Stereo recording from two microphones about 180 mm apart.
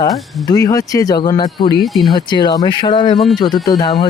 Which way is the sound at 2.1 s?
25° left (ahead or behind).